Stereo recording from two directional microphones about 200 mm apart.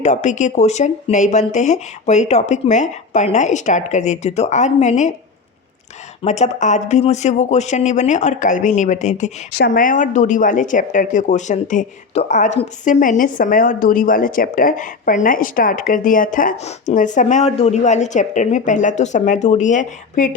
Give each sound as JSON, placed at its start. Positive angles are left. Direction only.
{"t": 0.0, "sound": "speech", "side_deg": 35}
{"t": 6.2, "sound": "speech", "side_deg": 35}
{"t": 9.5, "sound": "speech", "side_deg": 50}